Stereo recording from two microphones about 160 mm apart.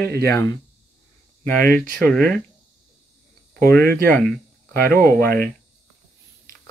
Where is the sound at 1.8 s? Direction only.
5° left (ahead or behind).